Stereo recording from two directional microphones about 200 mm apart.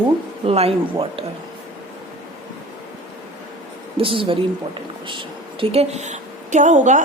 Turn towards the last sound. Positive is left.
turn(degrees=-35)  # may be behind; listen again after turning